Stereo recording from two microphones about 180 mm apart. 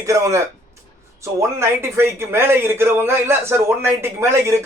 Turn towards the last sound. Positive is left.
turn(degrees=-15)  # may be behind; listen again after turning